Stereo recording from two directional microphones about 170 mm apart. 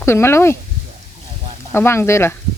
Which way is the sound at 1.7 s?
15° left (ahead or behind).